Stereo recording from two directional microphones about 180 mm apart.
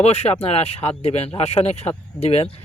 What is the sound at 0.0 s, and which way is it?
Speech, 35° left (ahead or behind).